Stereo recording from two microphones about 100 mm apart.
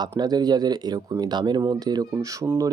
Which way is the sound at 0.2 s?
45° right (ahead or behind).